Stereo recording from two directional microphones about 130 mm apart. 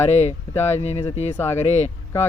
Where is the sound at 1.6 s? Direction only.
60° left (ahead or behind).